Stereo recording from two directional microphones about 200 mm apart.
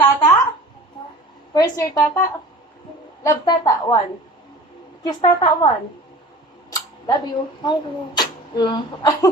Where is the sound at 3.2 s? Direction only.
20° left (ahead or behind).